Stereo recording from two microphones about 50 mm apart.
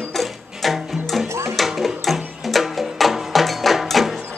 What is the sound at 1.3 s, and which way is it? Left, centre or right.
Music, right.